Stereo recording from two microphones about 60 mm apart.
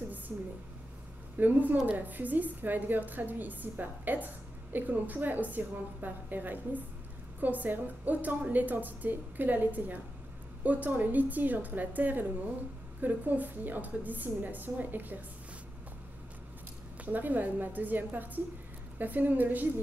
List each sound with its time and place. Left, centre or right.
1.4 s a woman's voice: right
17.0 s a woman's voice: right